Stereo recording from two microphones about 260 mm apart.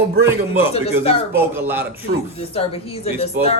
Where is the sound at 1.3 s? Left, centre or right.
Centre.